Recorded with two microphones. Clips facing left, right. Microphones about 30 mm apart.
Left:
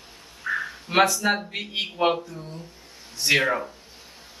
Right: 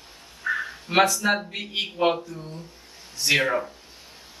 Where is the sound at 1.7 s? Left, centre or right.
Centre.